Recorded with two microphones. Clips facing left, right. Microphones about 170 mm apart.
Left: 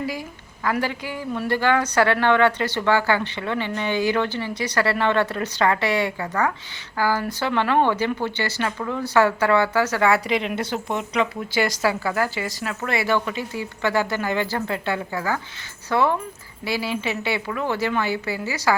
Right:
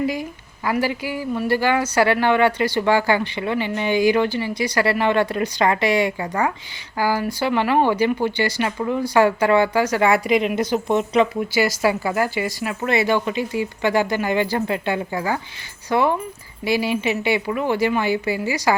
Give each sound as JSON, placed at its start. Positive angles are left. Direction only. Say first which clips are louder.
{"t": 0.0, "sound": "a woman's voice", "louder": "right 5 dB", "side_deg": -20}
{"t": 11.5, "sound": "a woman's voice", "louder": "right 2 dB", "side_deg": -10}